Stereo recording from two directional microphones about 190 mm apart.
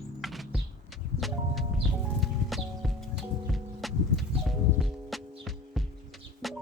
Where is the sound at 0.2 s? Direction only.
Centre (ahead or behind).